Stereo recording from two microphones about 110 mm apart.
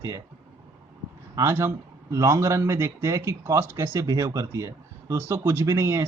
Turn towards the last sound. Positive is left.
turn(degrees=-25)  # may be behind; listen again after turning